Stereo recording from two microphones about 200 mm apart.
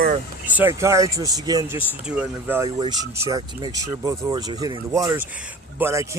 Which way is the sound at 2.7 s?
20° right (ahead or behind).